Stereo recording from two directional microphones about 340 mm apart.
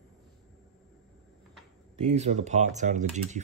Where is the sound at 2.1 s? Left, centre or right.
Centre.